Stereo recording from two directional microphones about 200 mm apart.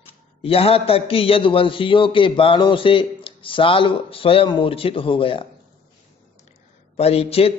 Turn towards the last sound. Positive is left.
turn(degrees=30)  # may be behind; listen again after turning